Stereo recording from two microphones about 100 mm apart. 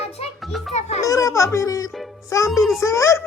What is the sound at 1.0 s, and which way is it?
Speech, 30° left (ahead or behind).